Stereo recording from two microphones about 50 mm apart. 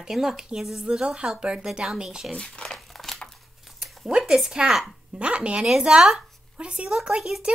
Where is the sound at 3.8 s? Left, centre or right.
Centre.